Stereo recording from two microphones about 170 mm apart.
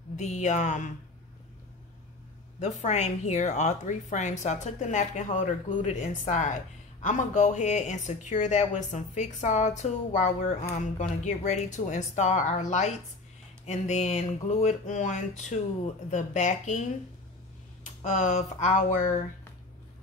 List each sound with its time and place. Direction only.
0.1 s speech: 45° left (ahead or behind)
2.6 s speech: 45° left (ahead or behind)
18.0 s speech: 45° left (ahead or behind)